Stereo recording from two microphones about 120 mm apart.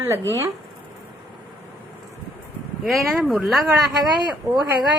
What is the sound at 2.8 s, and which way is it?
Speech, centre (ahead or behind).